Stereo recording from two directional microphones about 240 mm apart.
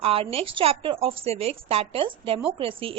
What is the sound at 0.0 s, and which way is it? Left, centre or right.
A woman's voice, right.